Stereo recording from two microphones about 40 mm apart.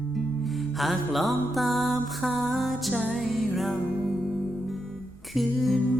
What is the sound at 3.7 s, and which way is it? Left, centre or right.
Music, centre.